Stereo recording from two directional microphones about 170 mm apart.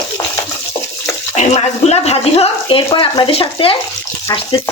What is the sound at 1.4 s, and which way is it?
Speech, 40° left (ahead or behind).